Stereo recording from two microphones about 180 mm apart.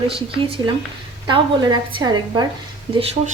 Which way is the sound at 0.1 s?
30° right (ahead or behind).